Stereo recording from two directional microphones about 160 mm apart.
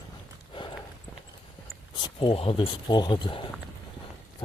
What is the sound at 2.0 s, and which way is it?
Speech, 30° left (ahead or behind).